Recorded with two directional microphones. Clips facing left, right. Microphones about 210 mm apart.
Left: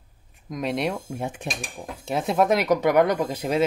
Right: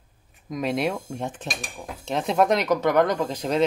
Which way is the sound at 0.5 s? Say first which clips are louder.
Right 1 dB; centre (ahead or behind).